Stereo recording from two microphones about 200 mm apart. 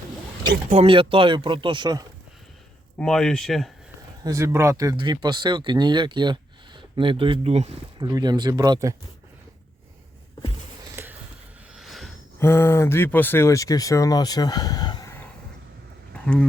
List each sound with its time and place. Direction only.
0.7 s speech: 30° right (ahead or behind)
3.0 s speech: 5° left (ahead or behind)
4.2 s speech: 15° right (ahead or behind); by 8.0 s 30° right (ahead or behind)
8.0 s speech: 20° right (ahead or behind)
10.9 s a sound: 10° right (ahead or behind)
12.4 s speech: 10° left (ahead or behind)
16.1 s speech: 5° left (ahead or behind)